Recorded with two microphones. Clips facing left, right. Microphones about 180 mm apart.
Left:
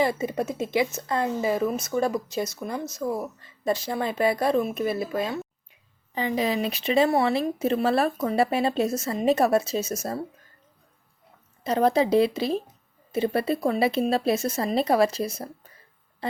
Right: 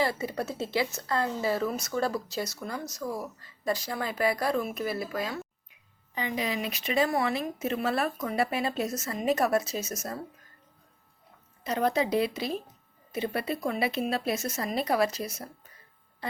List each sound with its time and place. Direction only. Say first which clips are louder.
0.0 s speech: left 5 dB; 20° left (ahead or behind)
11.6 s speech: left 6 dB; 30° left (ahead or behind)